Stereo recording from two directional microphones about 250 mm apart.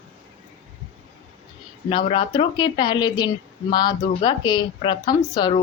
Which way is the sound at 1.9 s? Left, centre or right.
Centre.